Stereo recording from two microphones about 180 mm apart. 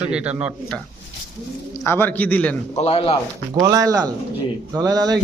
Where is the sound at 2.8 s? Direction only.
35° left (ahead or behind).